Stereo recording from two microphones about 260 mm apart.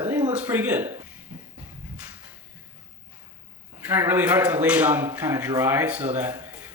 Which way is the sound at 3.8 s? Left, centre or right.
Centre.